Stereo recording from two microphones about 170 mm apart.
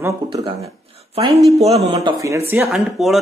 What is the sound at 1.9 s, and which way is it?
Speech, 20° right (ahead or behind).